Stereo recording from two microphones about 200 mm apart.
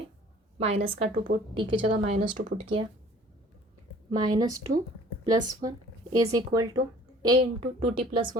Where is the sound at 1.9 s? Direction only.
40° right (ahead or behind).